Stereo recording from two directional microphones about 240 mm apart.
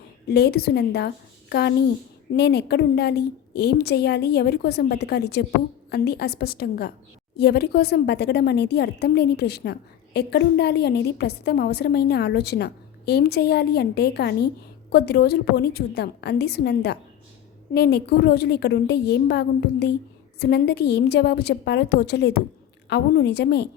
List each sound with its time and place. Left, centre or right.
0.3 s a woman's voice: left